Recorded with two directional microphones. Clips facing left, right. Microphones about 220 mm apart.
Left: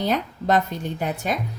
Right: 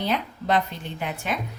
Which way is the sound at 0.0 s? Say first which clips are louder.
Left 3 dB; 45° left (ahead or behind).